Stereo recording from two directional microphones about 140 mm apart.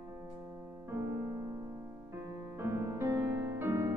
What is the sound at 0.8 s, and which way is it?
Music, 20° right (ahead or behind).